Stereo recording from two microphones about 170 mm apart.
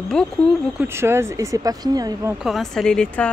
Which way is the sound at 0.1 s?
5° left (ahead or behind).